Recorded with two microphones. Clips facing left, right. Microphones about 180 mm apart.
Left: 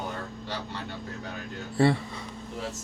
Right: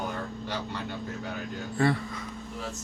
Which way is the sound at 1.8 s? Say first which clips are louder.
Left 3 dB; 30° left (ahead or behind).